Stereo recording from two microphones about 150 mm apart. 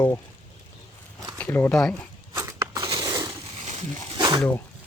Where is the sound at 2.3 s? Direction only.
25° right (ahead or behind).